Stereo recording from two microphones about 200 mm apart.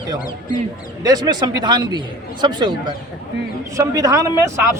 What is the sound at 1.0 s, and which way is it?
A man's voice, 20° right (ahead or behind).